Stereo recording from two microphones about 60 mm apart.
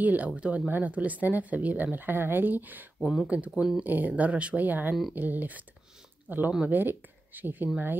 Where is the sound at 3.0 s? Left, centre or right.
Centre.